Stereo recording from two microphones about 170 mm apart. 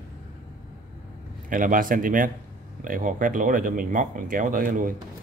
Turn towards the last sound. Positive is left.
turn(degrees=-55)  # may be behind; listen again after turning